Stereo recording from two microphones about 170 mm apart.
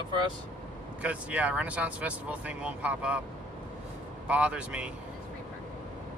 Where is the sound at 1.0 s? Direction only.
10° right (ahead or behind).